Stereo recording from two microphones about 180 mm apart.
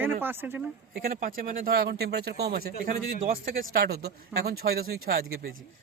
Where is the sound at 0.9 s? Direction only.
55° right (ahead or behind).